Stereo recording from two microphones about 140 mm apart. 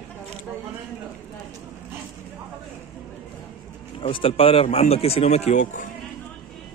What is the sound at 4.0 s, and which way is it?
Speech, 40° left (ahead or behind).